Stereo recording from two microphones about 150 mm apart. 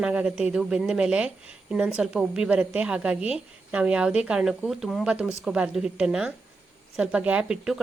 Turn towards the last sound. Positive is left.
turn(degrees=-5)  # may be behind; listen again after turning